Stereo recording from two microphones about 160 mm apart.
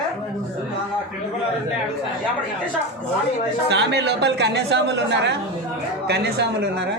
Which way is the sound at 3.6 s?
90° right.